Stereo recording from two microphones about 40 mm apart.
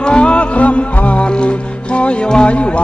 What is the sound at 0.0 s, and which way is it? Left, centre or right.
Music, left.